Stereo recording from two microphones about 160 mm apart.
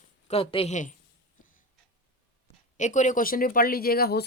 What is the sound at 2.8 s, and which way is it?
Speech, 50° left (ahead or behind).